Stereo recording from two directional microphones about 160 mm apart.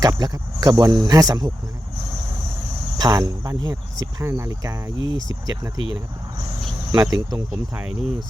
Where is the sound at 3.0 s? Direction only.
20° right (ahead or behind).